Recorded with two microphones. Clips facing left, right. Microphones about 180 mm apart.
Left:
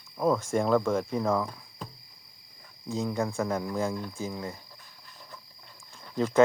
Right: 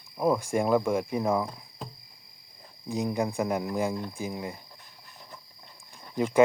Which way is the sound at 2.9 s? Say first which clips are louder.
Right 1 dB; 15° right (ahead or behind).